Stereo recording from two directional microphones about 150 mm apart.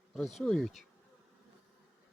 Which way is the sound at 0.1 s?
Centre (ahead or behind).